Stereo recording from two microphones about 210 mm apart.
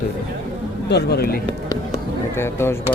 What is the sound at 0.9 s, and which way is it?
Speech, 50° left (ahead or behind).